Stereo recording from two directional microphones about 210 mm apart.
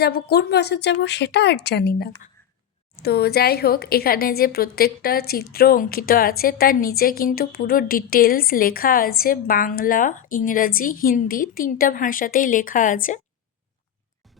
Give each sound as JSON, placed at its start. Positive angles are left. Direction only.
{"t": 0.0, "sound": "a woman's voice", "side_deg": 50}